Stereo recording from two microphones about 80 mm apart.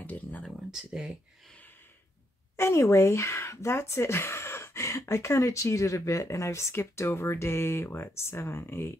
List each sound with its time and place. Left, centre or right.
0.0 s speech: left
0.7 s speech: centre
2.5 s speech: left